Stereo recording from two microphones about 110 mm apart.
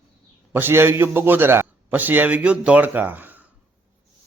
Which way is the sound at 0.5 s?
20° right (ahead or behind).